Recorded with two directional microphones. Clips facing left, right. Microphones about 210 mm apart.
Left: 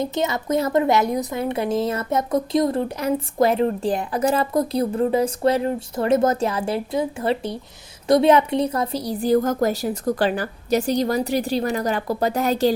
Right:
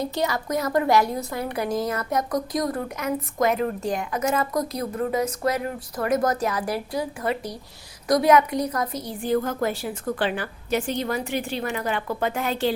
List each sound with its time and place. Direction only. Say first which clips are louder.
0.0 s a woman's voice: left 2 dB; 20° left (ahead or behind); by 12.7 s 40° left (ahead or behind)